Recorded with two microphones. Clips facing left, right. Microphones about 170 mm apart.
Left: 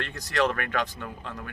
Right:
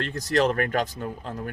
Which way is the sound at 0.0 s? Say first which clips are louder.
Right 4 dB; 40° right (ahead or behind).